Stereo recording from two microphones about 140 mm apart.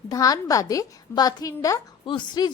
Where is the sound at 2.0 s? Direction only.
35° left (ahead or behind).